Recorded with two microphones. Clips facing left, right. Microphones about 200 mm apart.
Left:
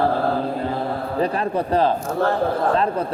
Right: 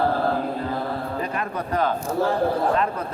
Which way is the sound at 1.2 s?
35° left (ahead or behind).